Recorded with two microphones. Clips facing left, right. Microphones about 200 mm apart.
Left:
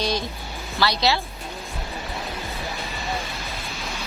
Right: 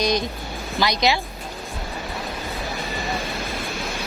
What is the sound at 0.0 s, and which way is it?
Speech, 15° right (ahead or behind).